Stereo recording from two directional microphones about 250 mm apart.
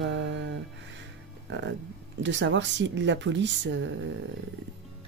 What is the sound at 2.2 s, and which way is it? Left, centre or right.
Speech, right.